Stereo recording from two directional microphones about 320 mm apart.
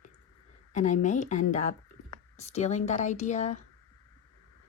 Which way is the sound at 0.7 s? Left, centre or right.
Left.